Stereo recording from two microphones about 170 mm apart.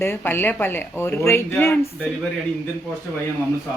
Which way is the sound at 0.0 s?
15° left (ahead or behind).